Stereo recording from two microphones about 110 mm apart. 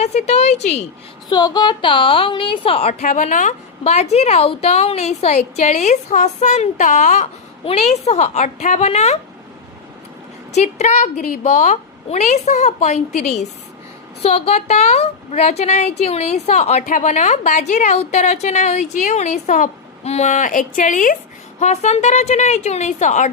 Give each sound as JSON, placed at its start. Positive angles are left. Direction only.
{"t": 0.0, "sound": "a woman's voice", "side_deg": 90}
{"t": 1.3, "sound": "a woman's voice", "side_deg": 35}
{"t": 3.8, "sound": "a woman's voice", "side_deg": 75}
{"t": 10.5, "sound": "a woman's voice", "side_deg": 90}
{"t": 14.2, "sound": "a woman's voice", "side_deg": 65}
{"t": 21.6, "sound": "a woman's voice", "side_deg": 90}